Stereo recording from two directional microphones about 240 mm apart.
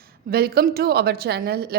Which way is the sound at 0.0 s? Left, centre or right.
Right.